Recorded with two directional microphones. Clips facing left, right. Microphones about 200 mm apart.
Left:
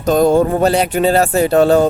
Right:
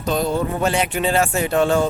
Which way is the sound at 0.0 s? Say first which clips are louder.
Left 9 dB; 45° left (ahead or behind).